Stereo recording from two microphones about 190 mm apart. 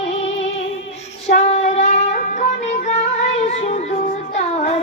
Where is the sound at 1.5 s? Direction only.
35° left (ahead or behind).